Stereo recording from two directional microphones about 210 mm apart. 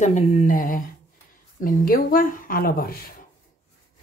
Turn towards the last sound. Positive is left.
turn(degrees=45)  # may be behind; listen again after turning